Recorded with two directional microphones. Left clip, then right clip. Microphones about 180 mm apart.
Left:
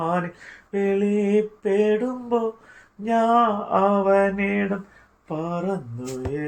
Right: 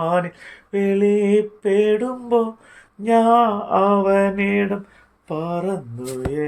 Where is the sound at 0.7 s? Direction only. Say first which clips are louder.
Right 4 dB; 45° right (ahead or behind).